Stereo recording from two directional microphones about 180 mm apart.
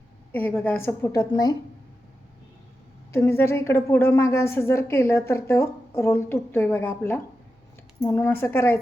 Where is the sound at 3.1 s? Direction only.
15° left (ahead or behind).